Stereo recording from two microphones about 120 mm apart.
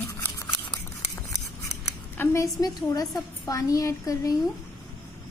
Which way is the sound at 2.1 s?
20° left (ahead or behind).